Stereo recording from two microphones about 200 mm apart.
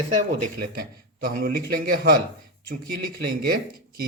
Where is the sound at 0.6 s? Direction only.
45° right (ahead or behind).